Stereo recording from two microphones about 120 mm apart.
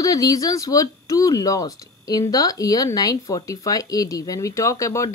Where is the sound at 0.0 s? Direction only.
30° left (ahead or behind).